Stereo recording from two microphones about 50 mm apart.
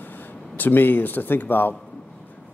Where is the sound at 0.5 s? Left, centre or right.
Left.